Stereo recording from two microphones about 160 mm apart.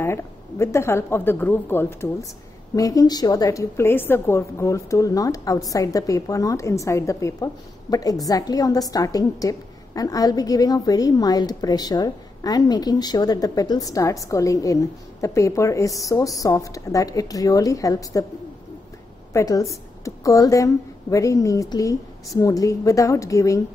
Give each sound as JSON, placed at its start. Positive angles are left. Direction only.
{"t": 0.0, "sound": "a woman's voice", "side_deg": 15}
{"t": 19.3, "sound": "a woman's voice", "side_deg": 20}